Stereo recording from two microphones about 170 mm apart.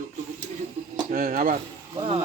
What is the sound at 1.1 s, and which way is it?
Speech, 55° right (ahead or behind).